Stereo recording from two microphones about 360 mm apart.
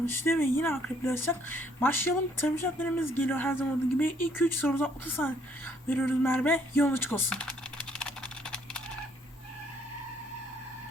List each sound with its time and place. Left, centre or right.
0.0 s speech: centre
7.9 s typing: centre